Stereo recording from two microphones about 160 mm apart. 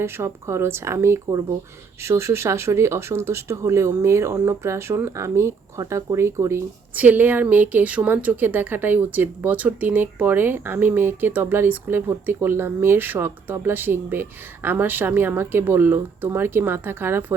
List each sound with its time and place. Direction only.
0.0 s speech: 15° right (ahead or behind)